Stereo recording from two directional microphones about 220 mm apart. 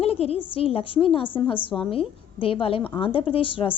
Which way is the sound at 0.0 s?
25° left (ahead or behind).